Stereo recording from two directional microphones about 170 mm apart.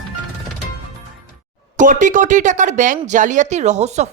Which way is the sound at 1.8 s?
50° right (ahead or behind).